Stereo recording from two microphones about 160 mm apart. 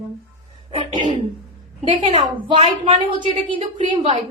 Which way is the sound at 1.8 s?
30° right (ahead or behind).